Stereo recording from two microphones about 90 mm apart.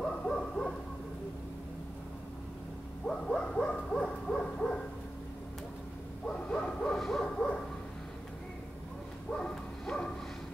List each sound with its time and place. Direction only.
0.0 s hoot: 5° left (ahead or behind)
3.3 s hoot: 10° left (ahead or behind)
6.2 s hoot: 10° left (ahead or behind)
9.4 s bow-wow: 10° left (ahead or behind)